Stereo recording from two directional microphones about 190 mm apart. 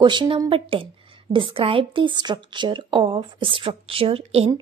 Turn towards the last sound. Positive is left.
turn(degrees=-30)  # may be behind; listen again after turning